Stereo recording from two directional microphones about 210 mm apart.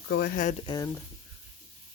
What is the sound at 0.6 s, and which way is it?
Speech, 20° left (ahead or behind).